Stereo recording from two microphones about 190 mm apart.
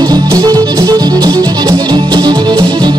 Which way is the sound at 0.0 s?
20° right (ahead or behind).